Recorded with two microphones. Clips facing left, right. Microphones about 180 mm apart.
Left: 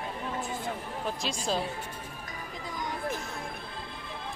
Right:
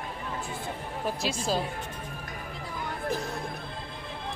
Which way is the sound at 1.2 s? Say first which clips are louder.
Right 2 dB; 5° right (ahead or behind).